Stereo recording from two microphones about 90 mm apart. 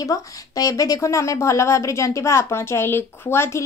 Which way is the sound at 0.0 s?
40° left (ahead or behind).